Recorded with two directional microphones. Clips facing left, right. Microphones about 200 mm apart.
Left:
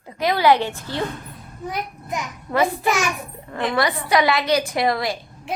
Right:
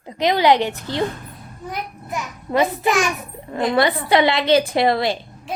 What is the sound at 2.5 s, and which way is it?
A woman's voice, 25° right (ahead or behind).